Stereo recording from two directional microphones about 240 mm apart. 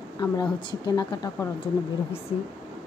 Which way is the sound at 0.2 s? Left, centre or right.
Centre.